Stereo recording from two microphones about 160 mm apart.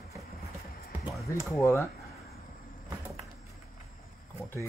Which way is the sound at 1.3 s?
20° left (ahead or behind).